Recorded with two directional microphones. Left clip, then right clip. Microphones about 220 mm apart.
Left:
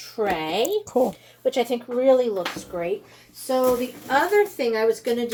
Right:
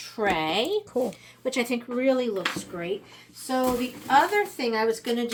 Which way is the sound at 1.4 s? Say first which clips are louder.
Left 5 dB; 50° right (ahead or behind).